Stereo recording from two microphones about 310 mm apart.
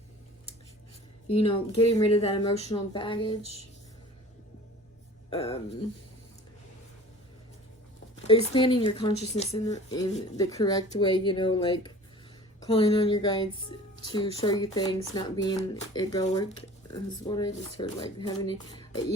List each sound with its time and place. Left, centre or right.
1.3 s speech: centre
5.3 s speech: centre
8.1 s speech: centre